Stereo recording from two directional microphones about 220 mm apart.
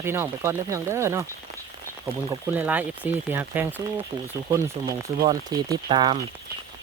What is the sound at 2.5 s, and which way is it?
Speech, 5° right (ahead or behind).